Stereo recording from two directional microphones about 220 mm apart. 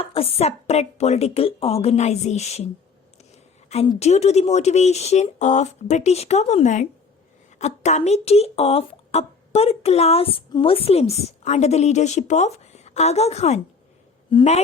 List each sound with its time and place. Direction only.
0.0 s speech: 25° left (ahead or behind)
3.7 s speech: 30° left (ahead or behind)